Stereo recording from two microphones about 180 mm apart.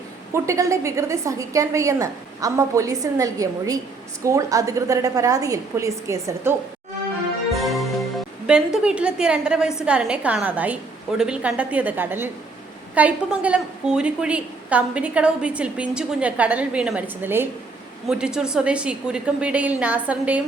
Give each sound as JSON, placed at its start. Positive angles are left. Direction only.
{"t": 0.3, "sound": "a woman's voice", "side_deg": -15}
{"t": 7.5, "sound": "music", "side_deg": 0}
{"t": 8.4, "sound": "a woman's voice", "side_deg": -5}